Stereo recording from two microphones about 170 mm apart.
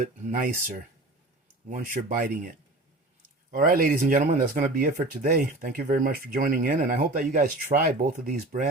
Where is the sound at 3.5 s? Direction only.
55° right (ahead or behind).